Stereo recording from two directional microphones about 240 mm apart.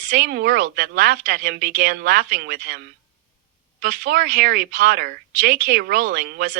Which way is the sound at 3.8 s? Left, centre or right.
Right.